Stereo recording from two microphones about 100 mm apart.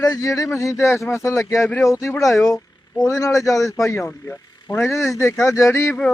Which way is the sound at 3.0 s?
30° left (ahead or behind).